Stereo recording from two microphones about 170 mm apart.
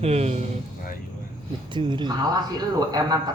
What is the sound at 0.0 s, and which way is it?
Speech, 40° right (ahead or behind).